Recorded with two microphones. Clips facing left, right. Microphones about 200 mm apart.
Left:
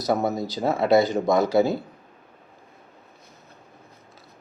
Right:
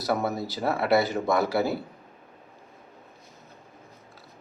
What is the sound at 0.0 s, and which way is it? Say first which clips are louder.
Speech: left 3 dB; 20° left (ahead or behind).